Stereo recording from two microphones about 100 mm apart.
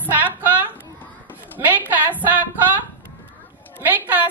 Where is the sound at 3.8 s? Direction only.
20° right (ahead or behind).